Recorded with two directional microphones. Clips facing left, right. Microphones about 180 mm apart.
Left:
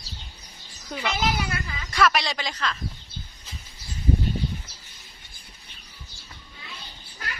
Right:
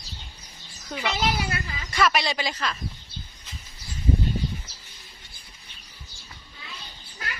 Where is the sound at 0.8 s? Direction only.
Centre (ahead or behind).